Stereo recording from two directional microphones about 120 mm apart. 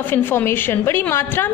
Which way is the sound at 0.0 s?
20° left (ahead or behind).